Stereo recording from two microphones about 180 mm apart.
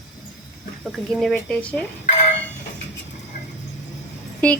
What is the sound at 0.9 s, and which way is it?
Speech, centre (ahead or behind).